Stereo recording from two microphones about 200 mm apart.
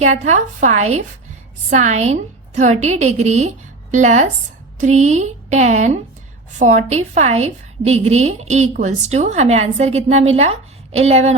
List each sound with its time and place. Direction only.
0.0 s a woman's voice: 35° right (ahead or behind)